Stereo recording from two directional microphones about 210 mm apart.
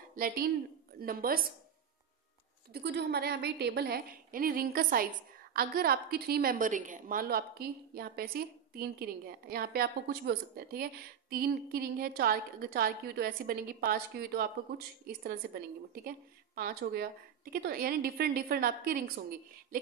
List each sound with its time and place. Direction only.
0.1 s a woman's voice: 45° right (ahead or behind)
2.7 s a woman's voice: 55° right (ahead or behind)